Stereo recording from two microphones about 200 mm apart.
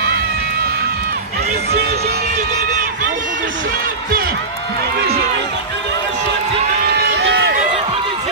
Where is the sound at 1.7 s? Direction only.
55° right (ahead or behind).